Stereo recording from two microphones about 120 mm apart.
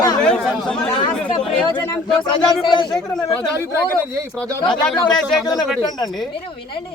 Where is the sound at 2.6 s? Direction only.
40° left (ahead or behind).